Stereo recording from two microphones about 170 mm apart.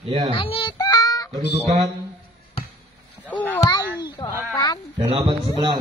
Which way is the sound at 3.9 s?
25° left (ahead or behind).